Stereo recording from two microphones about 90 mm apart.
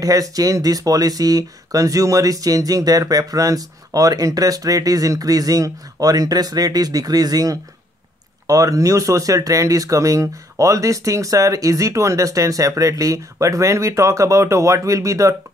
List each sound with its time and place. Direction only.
0.0 s speech: 40° right (ahead or behind)